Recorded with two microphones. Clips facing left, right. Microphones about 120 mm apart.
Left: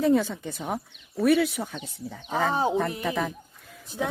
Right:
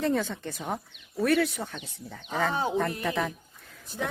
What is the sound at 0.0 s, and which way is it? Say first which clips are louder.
Speech: left 5 dB; 5° left (ahead or behind).